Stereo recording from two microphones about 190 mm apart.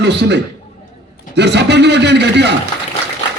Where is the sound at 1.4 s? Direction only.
65° right (ahead or behind).